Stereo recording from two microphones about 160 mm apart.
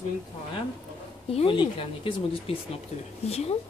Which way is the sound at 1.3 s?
35° left (ahead or behind).